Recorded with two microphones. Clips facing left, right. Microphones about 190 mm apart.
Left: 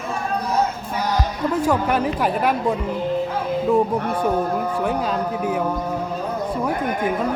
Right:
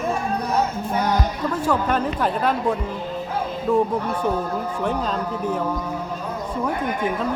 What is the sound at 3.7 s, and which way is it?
Speech, 20° left (ahead or behind).